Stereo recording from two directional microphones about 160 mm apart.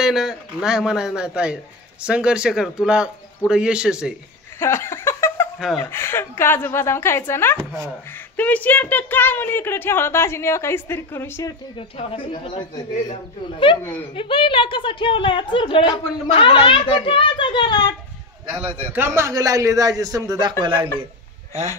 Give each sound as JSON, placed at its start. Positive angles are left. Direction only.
{"t": 0.0, "sound": "speech", "side_deg": 0}
{"t": 4.6, "sound": "laughter", "side_deg": 15}
{"t": 5.8, "sound": "speech", "side_deg": 15}
{"t": 12.0, "sound": "speech", "side_deg": 35}
{"t": 18.9, "sound": "a man's voice", "side_deg": -15}